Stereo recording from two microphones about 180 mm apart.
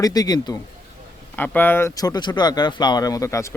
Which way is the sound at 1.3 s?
10° left (ahead or behind).